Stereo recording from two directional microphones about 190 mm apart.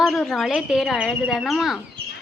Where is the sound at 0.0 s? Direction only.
Centre (ahead or behind).